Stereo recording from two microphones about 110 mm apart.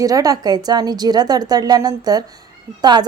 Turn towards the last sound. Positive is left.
turn(degrees=-40)  # may be behind; listen again after turning